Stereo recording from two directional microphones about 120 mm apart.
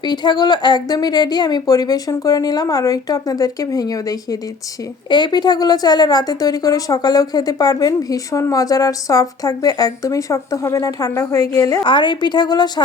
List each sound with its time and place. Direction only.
0.0 s a woman's voice: 40° left (ahead or behind)
11.9 s a woman's voice: 40° left (ahead or behind)